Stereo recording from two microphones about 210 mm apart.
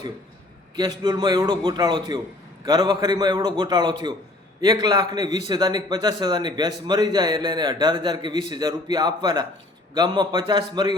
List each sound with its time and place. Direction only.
0.8 s a man's voice: 20° right (ahead or behind)